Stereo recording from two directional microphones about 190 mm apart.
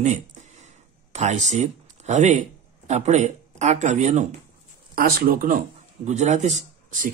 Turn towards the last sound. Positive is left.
turn(degrees=-45)  # may be behind; listen again after turning